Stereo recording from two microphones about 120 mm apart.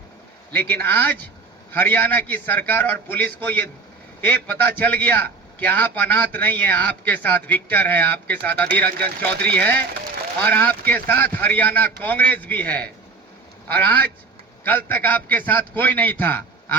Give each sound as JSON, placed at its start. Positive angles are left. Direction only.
{"t": 0.5, "sound": "a man's voice", "side_deg": 15}